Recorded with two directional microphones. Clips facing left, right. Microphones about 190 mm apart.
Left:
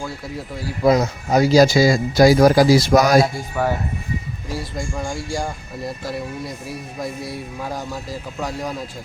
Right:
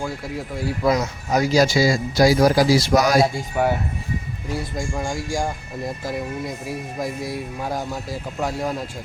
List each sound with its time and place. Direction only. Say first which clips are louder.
0.8 s speech: left 5 dB; 30° left (ahead or behind); by 3.2 s 50° left (ahead or behind)
3.3 s speech: right 1 dB; 20° right (ahead or behind)
6.1 s speech: right 2 dB; 15° right (ahead or behind)
8.4 s speech: right 2 dB; 5° right (ahead or behind)